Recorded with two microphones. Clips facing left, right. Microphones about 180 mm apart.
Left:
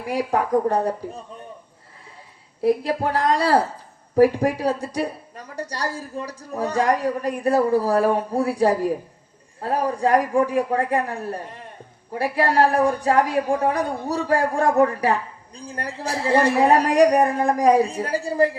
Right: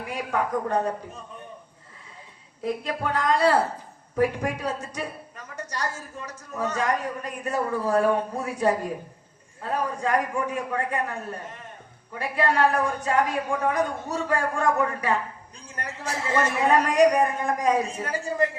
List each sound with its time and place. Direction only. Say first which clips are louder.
0.1 s a woman's voice: left 7 dB; 35° left (ahead or behind)
2.6 s a woman's voice: left 7 dB; 35° left (ahead or behind)